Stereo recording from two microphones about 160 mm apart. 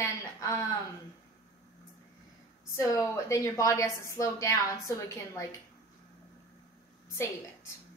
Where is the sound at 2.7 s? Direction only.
20° left (ahead or behind).